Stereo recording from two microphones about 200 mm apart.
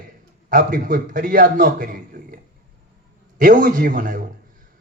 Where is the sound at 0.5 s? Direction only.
45° right (ahead or behind).